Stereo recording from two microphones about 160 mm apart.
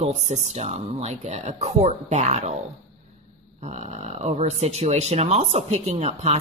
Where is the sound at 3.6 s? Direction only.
45° right (ahead or behind).